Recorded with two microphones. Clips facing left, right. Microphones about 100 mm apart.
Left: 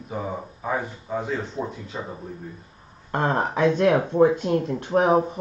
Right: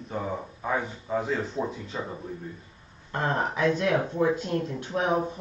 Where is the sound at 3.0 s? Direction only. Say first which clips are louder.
Left 4 dB; 45° left (ahead or behind).